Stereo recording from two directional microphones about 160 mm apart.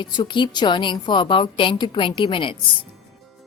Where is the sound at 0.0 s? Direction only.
30° left (ahead or behind).